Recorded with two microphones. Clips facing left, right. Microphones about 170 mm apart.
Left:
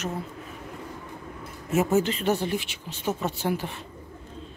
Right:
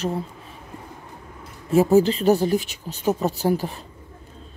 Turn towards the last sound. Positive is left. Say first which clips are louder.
# right 6 dB
turn(degrees=-40)  # may be behind; listen again after turning